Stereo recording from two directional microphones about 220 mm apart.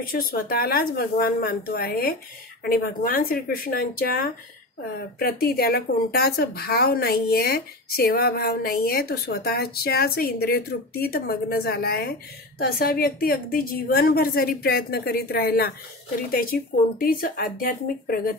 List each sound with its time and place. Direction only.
0.0 s speech: 40° left (ahead or behind)